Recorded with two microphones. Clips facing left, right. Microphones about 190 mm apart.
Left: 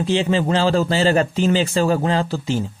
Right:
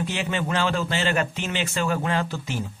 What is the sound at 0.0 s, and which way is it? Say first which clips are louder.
Speech: left 8 dB; 30° left (ahead or behind).